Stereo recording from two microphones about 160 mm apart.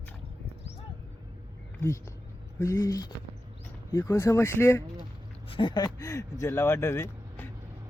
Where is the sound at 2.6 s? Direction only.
20° left (ahead or behind).